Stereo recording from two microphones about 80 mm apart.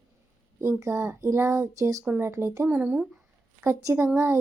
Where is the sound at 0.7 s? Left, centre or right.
Right.